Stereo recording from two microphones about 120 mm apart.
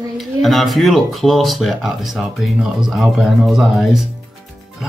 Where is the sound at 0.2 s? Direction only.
Centre (ahead or behind).